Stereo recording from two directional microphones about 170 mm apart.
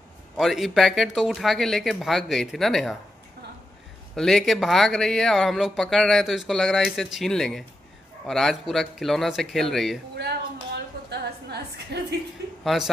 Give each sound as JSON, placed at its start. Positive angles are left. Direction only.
{"t": 0.4, "sound": "speech", "side_deg": 0}
{"t": 4.1, "sound": "speech", "side_deg": 0}
{"t": 10.1, "sound": "a sound", "side_deg": -75}
{"t": 12.6, "sound": "speech", "side_deg": 0}